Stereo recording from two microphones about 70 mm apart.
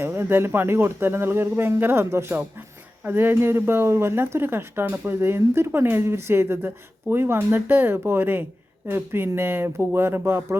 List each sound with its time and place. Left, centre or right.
0.0 s speech: right